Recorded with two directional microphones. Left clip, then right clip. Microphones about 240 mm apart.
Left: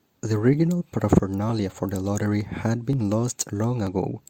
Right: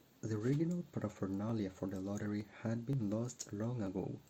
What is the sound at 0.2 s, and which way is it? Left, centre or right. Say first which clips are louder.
Speech: left 16 dB; left.